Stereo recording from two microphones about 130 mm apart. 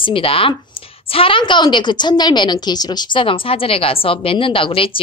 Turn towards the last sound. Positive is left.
turn(degrees=45)  # may be behind; listen again after turning